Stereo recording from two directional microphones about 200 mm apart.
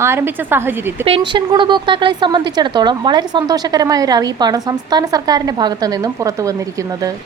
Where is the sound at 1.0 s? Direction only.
25° right (ahead or behind).